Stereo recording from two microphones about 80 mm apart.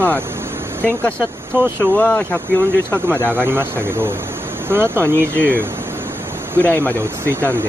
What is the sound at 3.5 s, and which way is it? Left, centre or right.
Speech, right.